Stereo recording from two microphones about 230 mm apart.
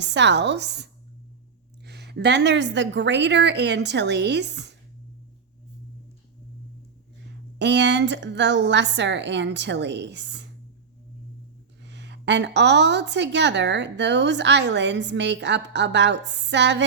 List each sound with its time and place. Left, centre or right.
0.0 s a woman's voice: right
7.6 s a woman's voice: right
11.8 s a woman's voice: right